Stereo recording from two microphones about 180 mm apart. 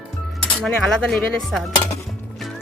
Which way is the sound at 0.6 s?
Centre (ahead or behind).